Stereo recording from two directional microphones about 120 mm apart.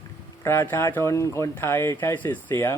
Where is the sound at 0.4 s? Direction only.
20° left (ahead or behind).